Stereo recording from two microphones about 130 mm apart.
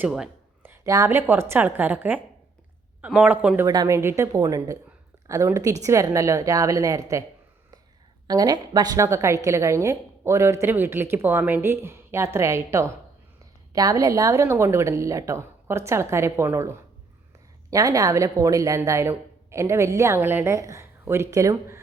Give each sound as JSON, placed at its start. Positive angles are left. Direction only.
{"t": 0.6, "sound": "a sound", "side_deg": -15}
{"t": 0.9, "sound": "a woman's voice", "side_deg": -20}
{"t": 3.7, "sound": "a woman's voice", "side_deg": -25}
{"t": 8.3, "sound": "a woman's voice", "side_deg": -30}